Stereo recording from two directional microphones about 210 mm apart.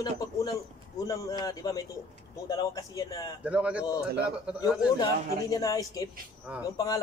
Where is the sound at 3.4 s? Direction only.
5° right (ahead or behind).